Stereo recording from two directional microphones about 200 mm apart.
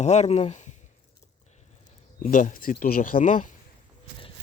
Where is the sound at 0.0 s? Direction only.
35° left (ahead or behind).